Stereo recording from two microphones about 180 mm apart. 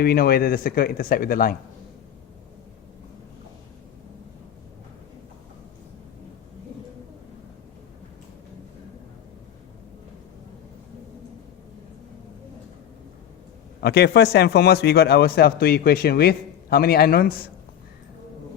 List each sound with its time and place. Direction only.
0.0 s a man's voice: 55° left (ahead or behind)
13.8 s a man's voice: 65° left (ahead or behind)